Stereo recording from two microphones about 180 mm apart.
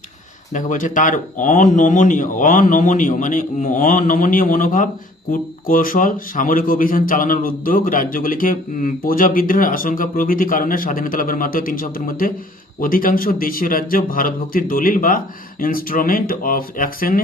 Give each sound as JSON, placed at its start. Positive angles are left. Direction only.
{"t": 0.5, "sound": "speech", "side_deg": 45}